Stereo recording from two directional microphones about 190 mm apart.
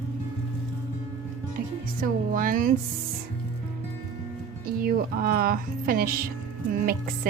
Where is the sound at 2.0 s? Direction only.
45° right (ahead or behind).